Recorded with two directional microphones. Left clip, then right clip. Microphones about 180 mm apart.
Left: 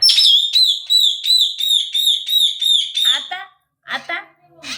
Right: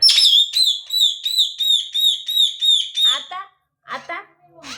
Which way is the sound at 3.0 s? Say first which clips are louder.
Left 1 dB; centre (ahead or behind).